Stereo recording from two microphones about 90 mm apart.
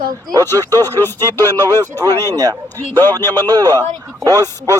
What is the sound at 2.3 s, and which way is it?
Speech, 45° right (ahead or behind).